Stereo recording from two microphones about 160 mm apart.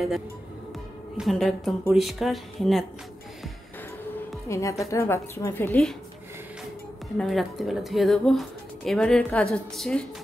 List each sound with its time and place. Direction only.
1.1 s speech: centre (ahead or behind)
4.5 s a woman's voice: 20° left (ahead or behind)
7.2 s speech: centre (ahead or behind)